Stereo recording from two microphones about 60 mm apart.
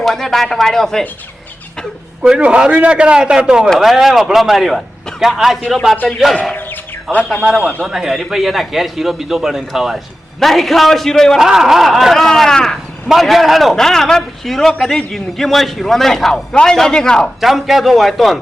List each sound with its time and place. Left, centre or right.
0.0 s a man's voice: centre
2.4 s a man's voice: centre
3.8 s a man's voice: centre
6.5 s a sound: left
7.4 s a man's voice: centre
11.3 s a man's voice: centre
17.4 s a man's voice: centre